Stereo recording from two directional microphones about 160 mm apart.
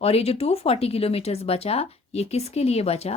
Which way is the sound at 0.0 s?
40° left (ahead or behind).